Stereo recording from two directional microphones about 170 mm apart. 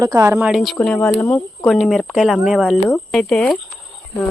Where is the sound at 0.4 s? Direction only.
Centre (ahead or behind).